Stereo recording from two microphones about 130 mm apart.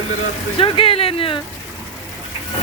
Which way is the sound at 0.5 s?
45° left (ahead or behind).